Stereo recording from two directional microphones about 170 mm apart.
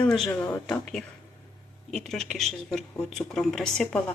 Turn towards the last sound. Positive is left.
turn(degrees=5)  # may be behind; listen again after turning